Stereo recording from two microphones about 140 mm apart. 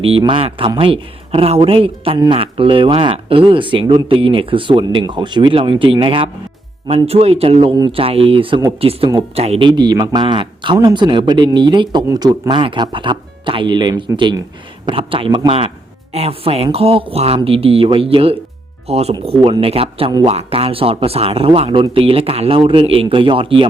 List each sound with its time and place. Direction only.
0.0 s speech: 40° right (ahead or behind)
14.8 s speech: 40° right (ahead or behind)